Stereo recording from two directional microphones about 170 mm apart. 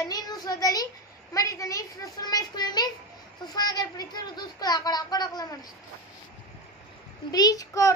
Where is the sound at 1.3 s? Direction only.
20° left (ahead or behind).